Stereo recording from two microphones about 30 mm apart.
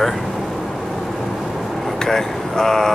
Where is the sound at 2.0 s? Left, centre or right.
Centre.